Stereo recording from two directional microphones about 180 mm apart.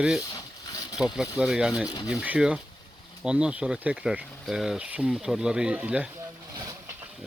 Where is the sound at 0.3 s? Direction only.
20° left (ahead or behind).